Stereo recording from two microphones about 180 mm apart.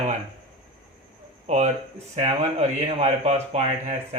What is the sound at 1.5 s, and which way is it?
Speech, 35° right (ahead or behind).